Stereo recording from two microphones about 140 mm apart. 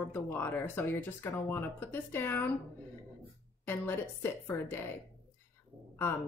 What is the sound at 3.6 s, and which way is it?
Speech, 15° left (ahead or behind).